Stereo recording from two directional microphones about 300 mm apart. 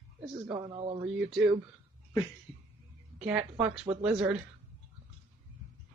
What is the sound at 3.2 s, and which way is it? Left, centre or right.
A woman's voice, centre.